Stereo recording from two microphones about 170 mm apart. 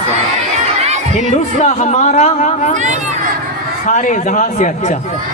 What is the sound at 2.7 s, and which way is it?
Speech, 45° right (ahead or behind).